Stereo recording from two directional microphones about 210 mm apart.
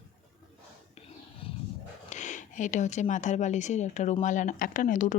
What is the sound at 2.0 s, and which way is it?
A woman's voice, 35° left (ahead or behind).